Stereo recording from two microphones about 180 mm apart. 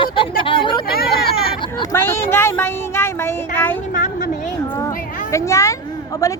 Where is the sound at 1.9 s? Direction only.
15° left (ahead or behind).